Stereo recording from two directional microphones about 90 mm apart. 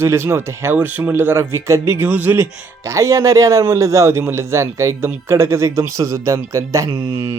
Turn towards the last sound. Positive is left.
turn(degrees=-35)  # may be behind; listen again after turning